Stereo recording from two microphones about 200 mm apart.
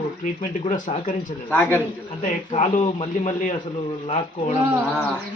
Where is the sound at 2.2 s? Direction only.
35° left (ahead or behind).